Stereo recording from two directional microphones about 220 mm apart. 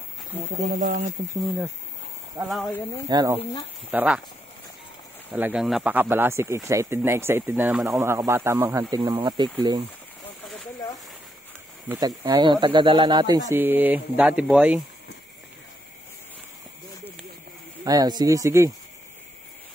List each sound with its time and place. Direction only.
0.6 s speech: 35° right (ahead or behind)
2.4 s speech: centre (ahead or behind)
3.1 s speech: 15° right (ahead or behind)
3.9 s speech: 5° right (ahead or behind)
5.3 s speech: 5° right (ahead or behind)
12.2 s speech: 20° right (ahead or behind)
17.8 s speech: 15° right (ahead or behind)